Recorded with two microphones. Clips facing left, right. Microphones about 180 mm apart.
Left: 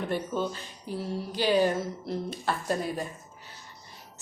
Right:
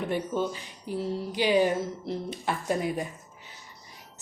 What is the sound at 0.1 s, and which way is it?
A woman's voice, 15° right (ahead or behind).